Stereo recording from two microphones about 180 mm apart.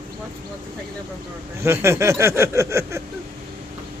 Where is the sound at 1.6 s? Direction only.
15° right (ahead or behind).